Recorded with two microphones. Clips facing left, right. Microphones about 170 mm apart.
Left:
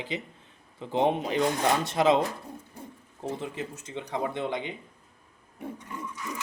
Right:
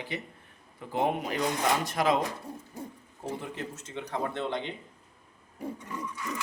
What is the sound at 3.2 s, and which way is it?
Speech, 20° left (ahead or behind).